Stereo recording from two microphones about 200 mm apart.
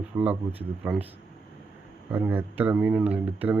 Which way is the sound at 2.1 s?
10° right (ahead or behind).